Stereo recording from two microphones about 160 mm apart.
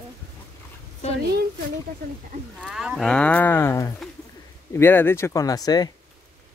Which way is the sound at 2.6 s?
5° right (ahead or behind).